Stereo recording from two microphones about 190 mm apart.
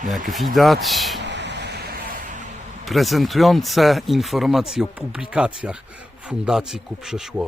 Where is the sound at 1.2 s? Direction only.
65° right (ahead or behind).